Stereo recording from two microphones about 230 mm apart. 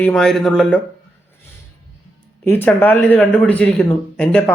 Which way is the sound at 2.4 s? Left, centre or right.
Centre.